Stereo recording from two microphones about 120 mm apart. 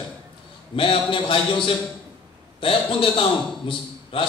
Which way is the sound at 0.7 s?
45° left (ahead or behind).